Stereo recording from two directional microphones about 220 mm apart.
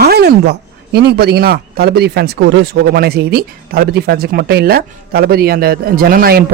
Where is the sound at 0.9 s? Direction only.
50° right (ahead or behind).